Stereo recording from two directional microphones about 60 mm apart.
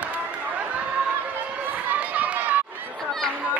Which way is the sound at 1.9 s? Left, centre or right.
Right.